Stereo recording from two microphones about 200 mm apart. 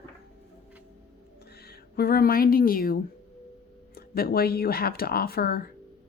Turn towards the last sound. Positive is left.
turn(degrees=50)  # may be behind; listen again after turning